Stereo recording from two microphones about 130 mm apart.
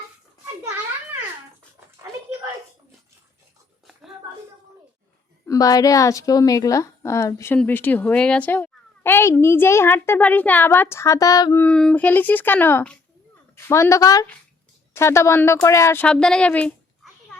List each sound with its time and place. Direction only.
5.5 s a woman's voice: 30° left (ahead or behind)
11.5 s a child's voice: 10° left (ahead or behind)
16.0 s a sound: 5° left (ahead or behind)